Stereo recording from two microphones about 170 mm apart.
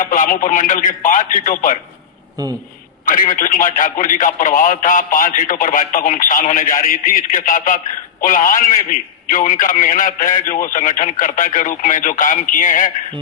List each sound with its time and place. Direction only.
0.0 s a man's voice: 50° left (ahead or behind)
3.1 s a man's voice: 55° left (ahead or behind)